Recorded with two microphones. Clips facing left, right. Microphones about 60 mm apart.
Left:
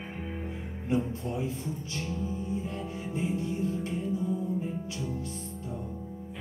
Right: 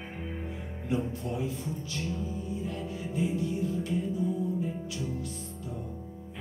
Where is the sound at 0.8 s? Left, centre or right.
Left.